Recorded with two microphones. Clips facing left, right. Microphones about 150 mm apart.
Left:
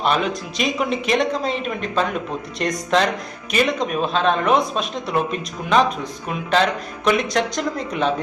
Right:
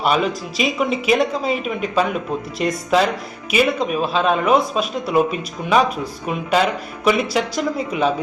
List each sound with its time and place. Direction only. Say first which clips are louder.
0.0 s a man's voice: right 2 dB; 5° right (ahead or behind)